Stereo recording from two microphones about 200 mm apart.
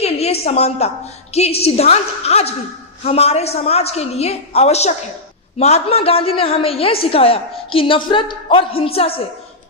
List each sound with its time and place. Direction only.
0.0 s a woman's voice: 30° left (ahead or behind)